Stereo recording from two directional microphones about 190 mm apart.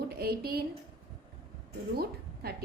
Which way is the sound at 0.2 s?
55° right (ahead or behind).